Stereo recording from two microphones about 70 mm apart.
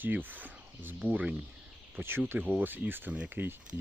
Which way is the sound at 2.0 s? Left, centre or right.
Right.